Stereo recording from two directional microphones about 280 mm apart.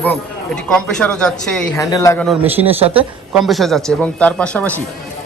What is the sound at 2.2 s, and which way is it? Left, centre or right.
Speech, centre.